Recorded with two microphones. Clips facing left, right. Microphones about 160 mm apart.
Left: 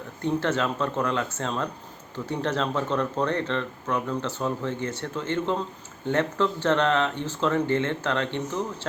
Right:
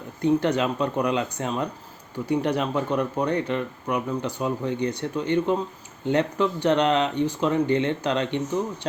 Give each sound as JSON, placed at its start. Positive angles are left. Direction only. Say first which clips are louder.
{"t": 0.2, "sound": "speech", "louder": "right 4 dB", "side_deg": -15}